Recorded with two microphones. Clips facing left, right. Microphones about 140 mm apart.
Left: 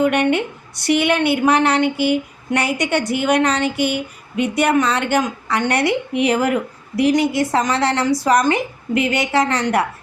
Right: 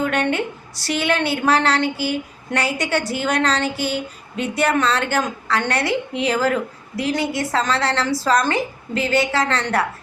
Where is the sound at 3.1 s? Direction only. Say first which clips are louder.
Left 6 dB; 15° left (ahead or behind).